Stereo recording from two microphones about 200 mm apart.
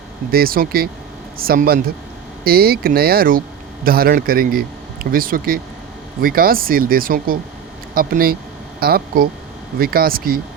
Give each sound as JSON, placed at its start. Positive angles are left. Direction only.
{"t": 0.3, "sound": "a man's voice", "side_deg": -45}